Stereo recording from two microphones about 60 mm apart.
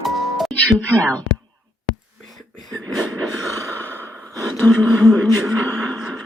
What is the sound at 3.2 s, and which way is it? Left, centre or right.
Gasp, right.